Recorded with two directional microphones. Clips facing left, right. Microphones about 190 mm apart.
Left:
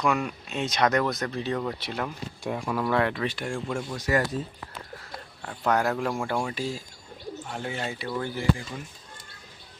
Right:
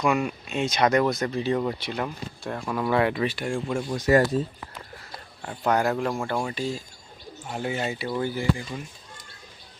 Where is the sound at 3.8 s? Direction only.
20° right (ahead or behind).